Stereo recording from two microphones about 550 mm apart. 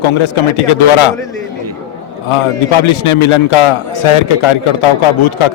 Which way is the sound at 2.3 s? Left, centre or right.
Left.